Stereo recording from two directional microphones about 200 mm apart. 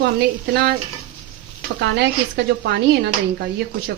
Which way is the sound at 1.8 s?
55° right (ahead or behind).